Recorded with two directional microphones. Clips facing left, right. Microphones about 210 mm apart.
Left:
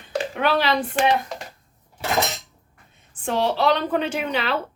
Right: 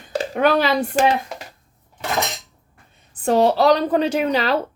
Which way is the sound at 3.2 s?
40° right (ahead or behind).